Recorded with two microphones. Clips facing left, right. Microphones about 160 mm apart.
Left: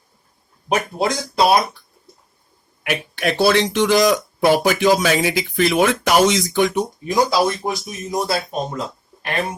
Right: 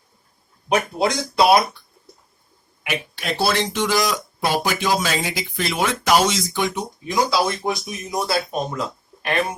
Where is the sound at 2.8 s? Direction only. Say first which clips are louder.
Left 5 dB; 60° left (ahead or behind).